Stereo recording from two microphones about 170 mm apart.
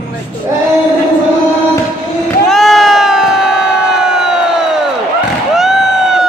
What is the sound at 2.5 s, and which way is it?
Crowd, centre (ahead or behind).